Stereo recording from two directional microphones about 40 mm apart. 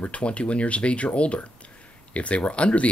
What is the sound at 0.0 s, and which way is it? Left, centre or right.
Speech, left.